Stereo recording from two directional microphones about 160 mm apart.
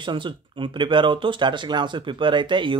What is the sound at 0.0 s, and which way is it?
Speech, 30° right (ahead or behind).